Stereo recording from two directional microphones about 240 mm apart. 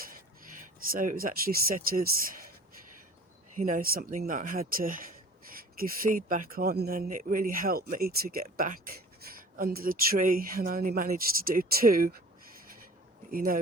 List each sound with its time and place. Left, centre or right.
0.5 s speech: right
3.6 s speech: right
13.3 s speech: right